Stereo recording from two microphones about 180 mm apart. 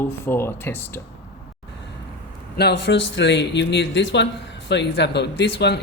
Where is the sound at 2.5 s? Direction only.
65° left (ahead or behind).